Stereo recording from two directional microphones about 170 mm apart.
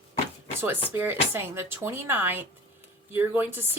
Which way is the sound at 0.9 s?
10° right (ahead or behind).